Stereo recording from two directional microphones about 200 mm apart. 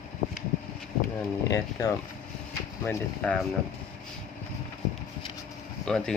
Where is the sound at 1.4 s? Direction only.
15° left (ahead or behind).